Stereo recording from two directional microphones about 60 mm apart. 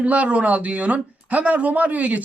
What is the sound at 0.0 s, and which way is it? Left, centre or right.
Speech, right.